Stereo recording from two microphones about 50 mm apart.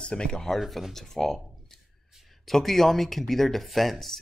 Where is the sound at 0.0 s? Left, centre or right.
Centre.